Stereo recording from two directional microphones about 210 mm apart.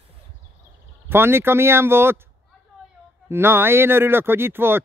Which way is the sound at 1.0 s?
10° right (ahead or behind).